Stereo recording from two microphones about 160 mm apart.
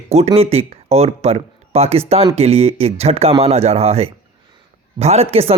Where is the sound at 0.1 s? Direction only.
40° right (ahead or behind).